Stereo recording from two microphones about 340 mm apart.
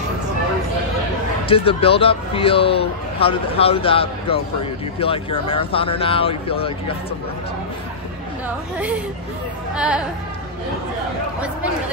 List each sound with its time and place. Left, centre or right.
1.5 s speech: centre
9.8 s speech: centre